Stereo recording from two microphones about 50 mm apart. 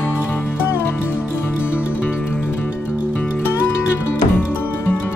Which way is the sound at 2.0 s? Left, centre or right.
Left.